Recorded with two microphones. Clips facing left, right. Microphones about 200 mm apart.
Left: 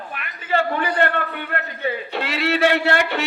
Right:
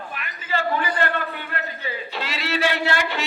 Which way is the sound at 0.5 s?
60° left (ahead or behind).